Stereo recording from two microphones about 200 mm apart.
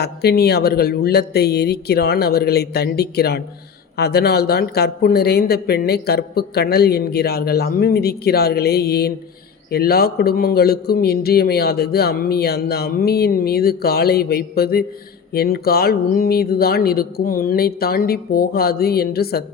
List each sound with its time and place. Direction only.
0.0 s speech: 55° left (ahead or behind)